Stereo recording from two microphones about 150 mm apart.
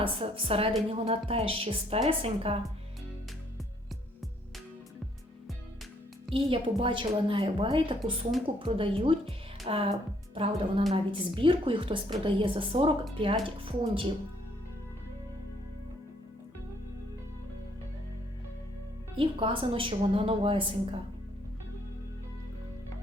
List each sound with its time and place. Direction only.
0.0 s a woman's voice: 40° right (ahead or behind)
6.3 s a woman's voice: 35° right (ahead or behind)
19.1 s a woman's voice: 35° right (ahead or behind)